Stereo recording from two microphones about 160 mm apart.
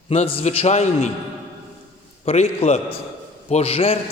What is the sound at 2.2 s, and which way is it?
Speech, 40° left (ahead or behind).